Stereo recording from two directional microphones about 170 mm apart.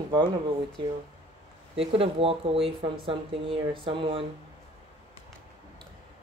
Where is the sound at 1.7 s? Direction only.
35° right (ahead or behind).